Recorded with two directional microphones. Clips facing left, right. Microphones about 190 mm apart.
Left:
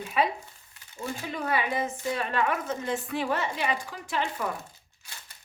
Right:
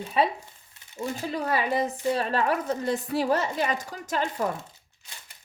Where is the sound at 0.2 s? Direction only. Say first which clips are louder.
Right 2 dB; 30° right (ahead or behind).